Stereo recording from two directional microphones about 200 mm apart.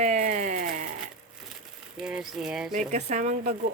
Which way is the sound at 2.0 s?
5° right (ahead or behind).